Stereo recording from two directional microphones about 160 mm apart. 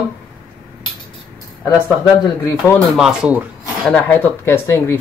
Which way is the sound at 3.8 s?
10° left (ahead or behind).